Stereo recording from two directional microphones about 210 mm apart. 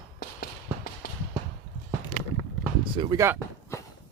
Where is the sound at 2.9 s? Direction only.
20° right (ahead or behind).